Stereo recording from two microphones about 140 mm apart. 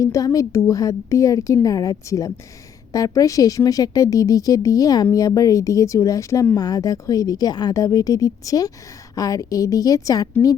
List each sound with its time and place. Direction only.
0.0 s speech: 25° left (ahead or behind)